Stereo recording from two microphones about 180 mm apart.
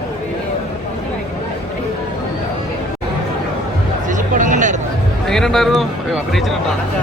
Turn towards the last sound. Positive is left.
turn(degrees=0)  # may be behind; listen again after turning